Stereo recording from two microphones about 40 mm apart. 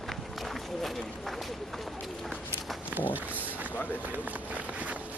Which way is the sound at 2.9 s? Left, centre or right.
Right.